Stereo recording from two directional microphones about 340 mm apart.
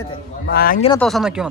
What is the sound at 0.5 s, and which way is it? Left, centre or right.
Speech, left.